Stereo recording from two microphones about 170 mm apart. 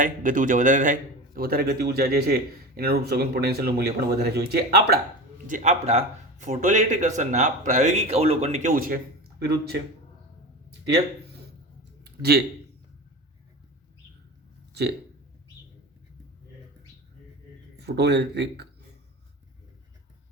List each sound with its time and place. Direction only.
0.0 s a man's voice: 50° right (ahead or behind); by 4.9 s 70° right (ahead or behind)
5.5 s speech: 45° right (ahead or behind)
8.7 s a man's voice: 55° right (ahead or behind)
9.4 s speech: 70° right (ahead or behind)
12.0 s a sound: 70° right (ahead or behind)
14.7 s a sound: 75° right (ahead or behind)
17.7 s speech: 75° right (ahead or behind)